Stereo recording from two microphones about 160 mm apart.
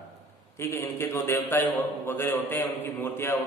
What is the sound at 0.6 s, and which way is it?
A man's voice, 15° left (ahead or behind).